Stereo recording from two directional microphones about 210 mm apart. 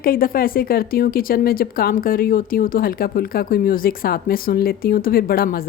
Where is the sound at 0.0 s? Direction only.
45° left (ahead or behind).